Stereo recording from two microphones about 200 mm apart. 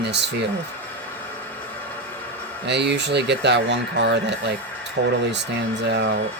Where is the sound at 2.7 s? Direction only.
60° right (ahead or behind).